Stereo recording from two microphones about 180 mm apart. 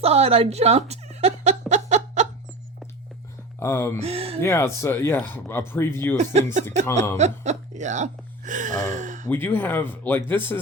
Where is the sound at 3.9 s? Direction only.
35° right (ahead or behind).